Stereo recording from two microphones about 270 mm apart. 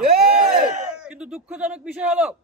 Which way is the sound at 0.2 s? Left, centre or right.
Right.